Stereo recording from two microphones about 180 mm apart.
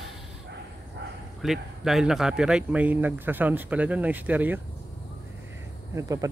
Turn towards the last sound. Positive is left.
turn(degrees=-20)  # may be behind; listen again after turning